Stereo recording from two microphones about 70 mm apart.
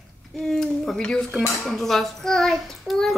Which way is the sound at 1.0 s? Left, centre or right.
Centre.